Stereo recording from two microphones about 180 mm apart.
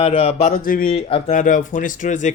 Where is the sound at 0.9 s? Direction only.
30° left (ahead or behind).